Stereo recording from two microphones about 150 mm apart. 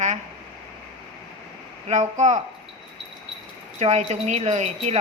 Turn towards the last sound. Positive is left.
turn(degrees=-50)  # may be behind; listen again after turning